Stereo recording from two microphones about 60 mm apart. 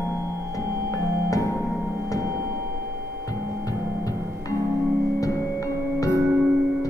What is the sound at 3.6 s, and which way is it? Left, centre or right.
Music, left.